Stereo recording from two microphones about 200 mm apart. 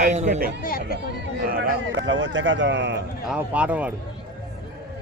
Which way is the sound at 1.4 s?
50° right (ahead or behind).